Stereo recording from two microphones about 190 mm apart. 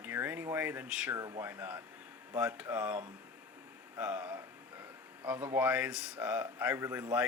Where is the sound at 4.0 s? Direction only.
5° right (ahead or behind).